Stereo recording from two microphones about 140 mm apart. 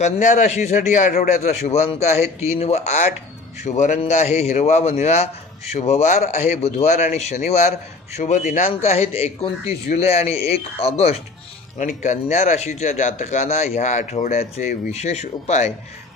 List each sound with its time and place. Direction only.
0.0 s speech: 60° left (ahead or behind)
8.2 s speech: 60° left (ahead or behind); by 11.1 s 45° left (ahead or behind)
11.8 s speech: 60° left (ahead or behind)